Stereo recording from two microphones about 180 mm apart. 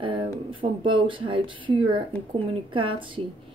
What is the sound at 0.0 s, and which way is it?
A woman's voice, 30° right (ahead or behind).